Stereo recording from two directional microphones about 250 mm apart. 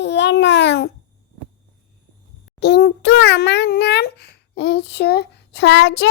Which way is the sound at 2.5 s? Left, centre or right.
Left.